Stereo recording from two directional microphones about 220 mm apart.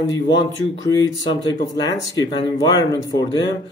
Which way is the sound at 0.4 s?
20° left (ahead or behind).